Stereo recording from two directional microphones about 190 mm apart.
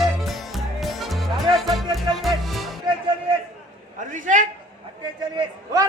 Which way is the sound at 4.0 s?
40° right (ahead or behind).